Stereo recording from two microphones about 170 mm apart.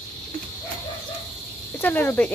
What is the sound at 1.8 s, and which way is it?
Speech, 10° left (ahead or behind).